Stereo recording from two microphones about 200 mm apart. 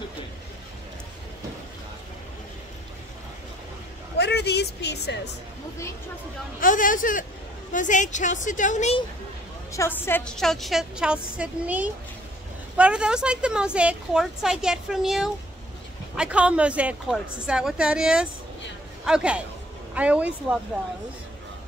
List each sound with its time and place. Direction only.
4.2 s a woman's voice: 55° left (ahead or behind)
6.6 s a woman's voice: 40° left (ahead or behind)
9.7 s a woman's voice: 10° left (ahead or behind); by 20.3 s 5° right (ahead or behind)